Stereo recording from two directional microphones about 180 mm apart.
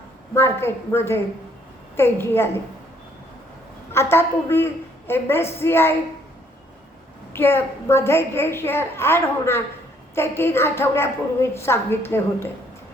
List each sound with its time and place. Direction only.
0.3 s a woman's voice: 15° left (ahead or behind)
3.9 s a woman's voice: 15° left (ahead or behind)
7.3 s a woman's voice: 15° left (ahead or behind)